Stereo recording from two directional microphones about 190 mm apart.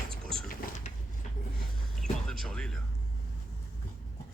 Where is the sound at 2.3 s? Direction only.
5° left (ahead or behind).